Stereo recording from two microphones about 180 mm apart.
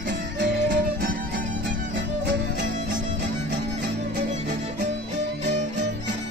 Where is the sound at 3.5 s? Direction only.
65° right (ahead or behind).